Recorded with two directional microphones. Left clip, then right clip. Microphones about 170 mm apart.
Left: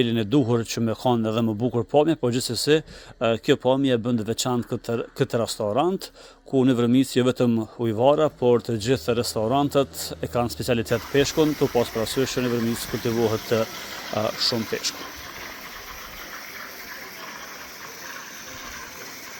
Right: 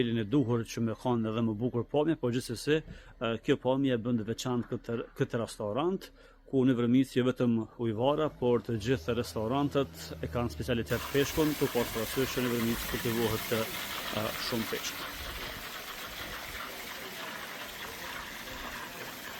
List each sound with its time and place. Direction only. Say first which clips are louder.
0.0 s speech: left 8 dB; 45° left (ahead or behind)